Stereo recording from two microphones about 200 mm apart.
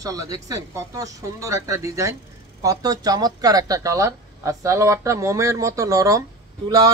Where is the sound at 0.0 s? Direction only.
15° right (ahead or behind).